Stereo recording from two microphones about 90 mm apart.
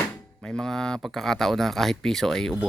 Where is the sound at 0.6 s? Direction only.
5° left (ahead or behind).